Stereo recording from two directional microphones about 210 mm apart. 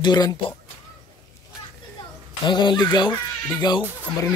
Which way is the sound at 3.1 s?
10° left (ahead or behind).